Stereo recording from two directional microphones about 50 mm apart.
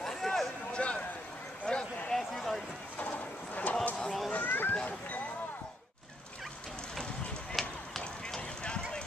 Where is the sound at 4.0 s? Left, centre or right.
Centre.